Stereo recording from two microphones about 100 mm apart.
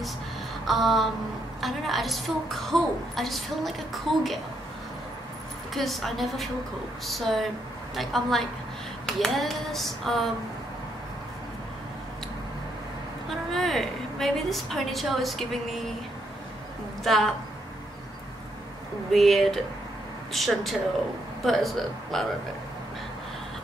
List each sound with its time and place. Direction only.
0.7 s a woman's voice: centre (ahead or behind)
5.8 s a woman's voice: centre (ahead or behind)
13.3 s a woman's voice: centre (ahead or behind)
17.0 s a woman's voice: centre (ahead or behind)
19.1 s a woman's voice: centre (ahead or behind)